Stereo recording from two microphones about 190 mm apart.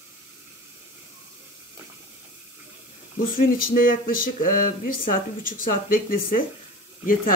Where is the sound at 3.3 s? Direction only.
50° left (ahead or behind).